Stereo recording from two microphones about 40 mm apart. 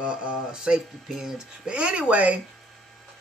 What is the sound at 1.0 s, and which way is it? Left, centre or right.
Speech, centre.